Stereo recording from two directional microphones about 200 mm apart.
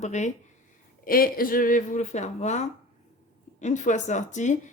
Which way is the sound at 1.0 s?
45° left (ahead or behind).